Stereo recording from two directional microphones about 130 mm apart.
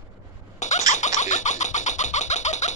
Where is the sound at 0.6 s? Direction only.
65° left (ahead or behind).